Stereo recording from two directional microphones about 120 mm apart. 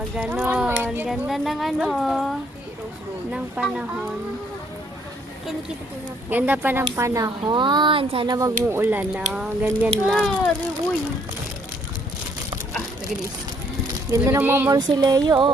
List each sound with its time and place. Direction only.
0.2 s a sound: 10° right (ahead or behind)
1.3 s speech: centre (ahead or behind)
6.3 s speech: 15° right (ahead or behind)
7.4 s speech: 40° right (ahead or behind)
8.3 s speech: 30° right (ahead or behind); by 10.5 s centre (ahead or behind)
14.1 s speech: 20° right (ahead or behind)
14.7 s speech: 35° right (ahead or behind)